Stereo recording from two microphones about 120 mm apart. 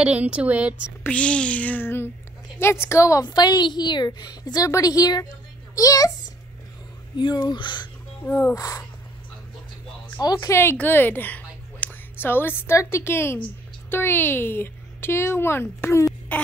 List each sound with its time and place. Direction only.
0.0 s speech: 10° right (ahead or behind)
1.0 s a sound: 10° left (ahead or behind)
2.6 s a woman's voice: 20° left (ahead or behind)
3.3 s a woman's voice: 35° left (ahead or behind)
7.4 s a woman's voice: 40° left (ahead or behind)
8.3 s a sound: 15° left (ahead or behind)
8.5 s a woman's voice: 30° left (ahead or behind)
10.2 s a woman's voice: 35° left (ahead or behind)
10.5 s a woman's voice: 20° left (ahead or behind)